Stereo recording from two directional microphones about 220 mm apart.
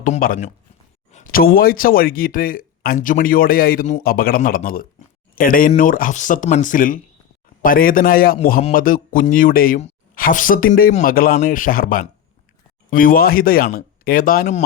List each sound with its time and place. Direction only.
0.0 s speech: 40° left (ahead or behind)